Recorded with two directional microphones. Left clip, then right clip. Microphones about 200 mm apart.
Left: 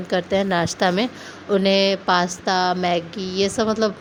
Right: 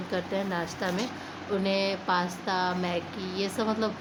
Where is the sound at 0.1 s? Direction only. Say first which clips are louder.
Left 11 dB; 40° left (ahead or behind).